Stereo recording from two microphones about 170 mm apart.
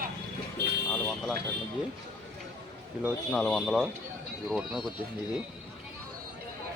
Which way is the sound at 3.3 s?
5° left (ahead or behind).